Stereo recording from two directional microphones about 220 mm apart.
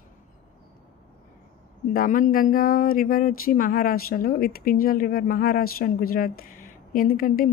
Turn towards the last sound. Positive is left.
turn(degrees=40)  # may be behind; listen again after turning